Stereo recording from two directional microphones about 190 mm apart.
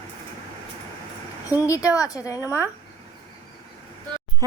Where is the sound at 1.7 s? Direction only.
15° left (ahead or behind).